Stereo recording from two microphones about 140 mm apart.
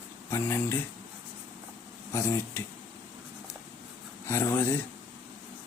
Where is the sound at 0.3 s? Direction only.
20° left (ahead or behind).